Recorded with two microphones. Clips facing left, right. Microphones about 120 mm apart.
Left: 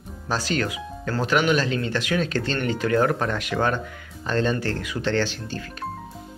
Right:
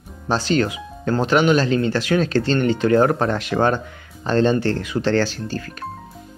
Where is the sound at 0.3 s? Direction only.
25° right (ahead or behind); by 5.9 s 45° right (ahead or behind).